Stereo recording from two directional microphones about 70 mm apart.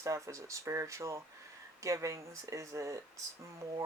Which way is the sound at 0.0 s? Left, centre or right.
Right.